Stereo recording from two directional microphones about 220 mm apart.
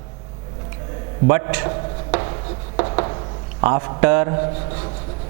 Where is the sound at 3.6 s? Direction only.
15° right (ahead or behind).